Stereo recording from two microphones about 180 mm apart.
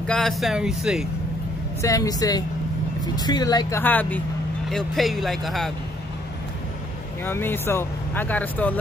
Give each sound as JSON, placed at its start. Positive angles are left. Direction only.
{"t": 0.0, "sound": "speech", "side_deg": 5}
{"t": 1.8, "sound": "a woman's voice", "side_deg": 20}
{"t": 7.2, "sound": "speech", "side_deg": 10}